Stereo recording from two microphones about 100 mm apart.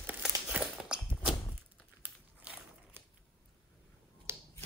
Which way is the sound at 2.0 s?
15° right (ahead or behind).